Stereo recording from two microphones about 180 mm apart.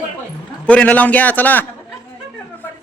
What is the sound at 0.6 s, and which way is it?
A man's voice, 5° left (ahead or behind).